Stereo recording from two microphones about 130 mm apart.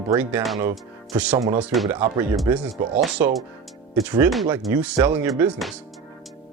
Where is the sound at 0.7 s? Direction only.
10° right (ahead or behind).